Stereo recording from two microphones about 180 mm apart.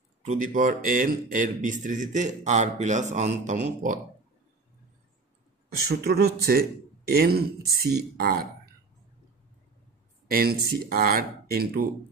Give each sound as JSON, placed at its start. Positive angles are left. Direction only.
{"t": 0.3, "sound": "a man's voice", "side_deg": -45}
{"t": 5.9, "sound": "speech", "side_deg": -60}
{"t": 10.3, "sound": "speech", "side_deg": -55}